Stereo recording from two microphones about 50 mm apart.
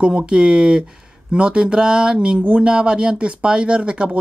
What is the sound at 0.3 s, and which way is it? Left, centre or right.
Speech, centre.